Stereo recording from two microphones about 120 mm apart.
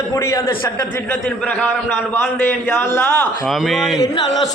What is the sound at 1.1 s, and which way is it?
Speech, 10° left (ahead or behind).